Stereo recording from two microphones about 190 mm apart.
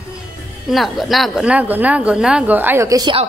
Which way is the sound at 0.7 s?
Centre (ahead or behind).